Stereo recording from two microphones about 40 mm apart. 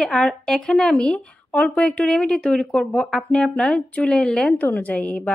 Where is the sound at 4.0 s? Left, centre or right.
Centre.